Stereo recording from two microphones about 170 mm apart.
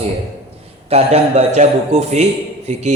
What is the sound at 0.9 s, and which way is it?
A man's voice, 35° right (ahead or behind).